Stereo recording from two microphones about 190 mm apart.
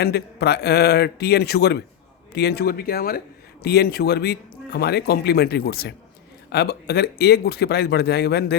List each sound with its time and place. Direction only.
0.0 s speech: 60° left (ahead or behind)